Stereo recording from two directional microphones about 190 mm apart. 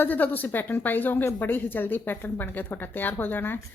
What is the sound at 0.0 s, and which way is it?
A woman's voice, 10° left (ahead or behind).